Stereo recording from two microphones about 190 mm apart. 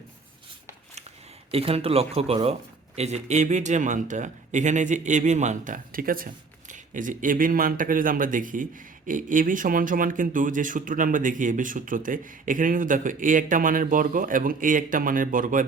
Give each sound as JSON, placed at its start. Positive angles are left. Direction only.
{"t": 1.5, "sound": "speech", "side_deg": -30}